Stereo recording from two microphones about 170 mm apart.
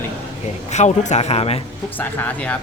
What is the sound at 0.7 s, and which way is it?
Speech, 45° left (ahead or behind).